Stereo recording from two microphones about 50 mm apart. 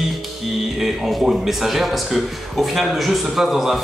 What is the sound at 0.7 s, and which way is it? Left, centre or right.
A man's voice, centre.